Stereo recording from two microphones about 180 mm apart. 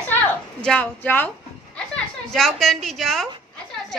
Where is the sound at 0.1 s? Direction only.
5° left (ahead or behind).